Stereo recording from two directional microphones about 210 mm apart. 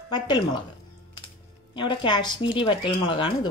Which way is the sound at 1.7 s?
20° left (ahead or behind).